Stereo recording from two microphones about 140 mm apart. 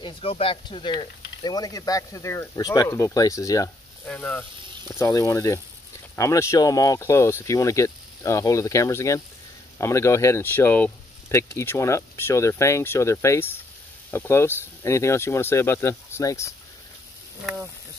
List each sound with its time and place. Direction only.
0.0 s speech: 40° left (ahead or behind); by 3.7 s 25° left (ahead or behind)
4.0 s speech: 10° left (ahead or behind)
4.9 s speech: 20° left (ahead or behind)